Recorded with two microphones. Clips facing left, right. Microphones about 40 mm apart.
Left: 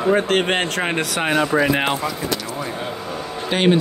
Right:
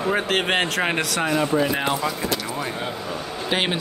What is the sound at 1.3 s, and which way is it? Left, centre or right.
Speech, left.